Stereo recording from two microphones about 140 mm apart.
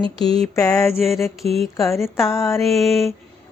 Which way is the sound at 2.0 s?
20° left (ahead or behind).